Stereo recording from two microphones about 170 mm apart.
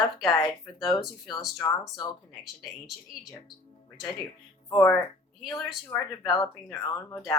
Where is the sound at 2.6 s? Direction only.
Centre (ahead or behind).